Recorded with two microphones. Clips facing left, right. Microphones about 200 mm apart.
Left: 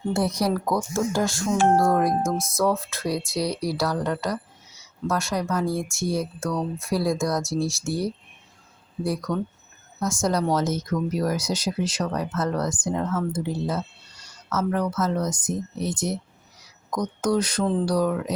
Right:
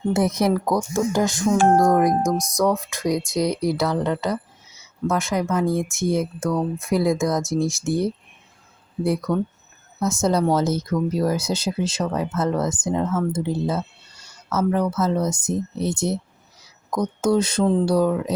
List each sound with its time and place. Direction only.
0.1 s speech: 20° right (ahead or behind)
9.3 s speech: 15° right (ahead or behind)
10.2 s speech: 25° right (ahead or behind)